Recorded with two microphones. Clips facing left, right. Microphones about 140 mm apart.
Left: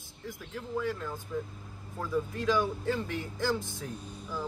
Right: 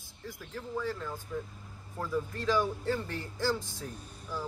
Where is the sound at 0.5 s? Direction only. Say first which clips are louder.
Left 2 dB; 15° left (ahead or behind).